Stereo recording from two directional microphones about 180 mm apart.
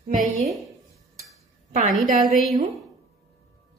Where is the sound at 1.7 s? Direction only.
45° right (ahead or behind).